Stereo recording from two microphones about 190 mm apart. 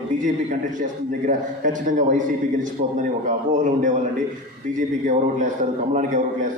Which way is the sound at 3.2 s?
40° right (ahead or behind).